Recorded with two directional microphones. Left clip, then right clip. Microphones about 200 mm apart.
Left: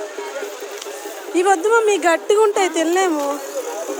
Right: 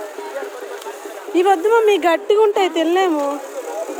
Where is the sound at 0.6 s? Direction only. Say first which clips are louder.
Right 1 dB; 45° right (ahead or behind).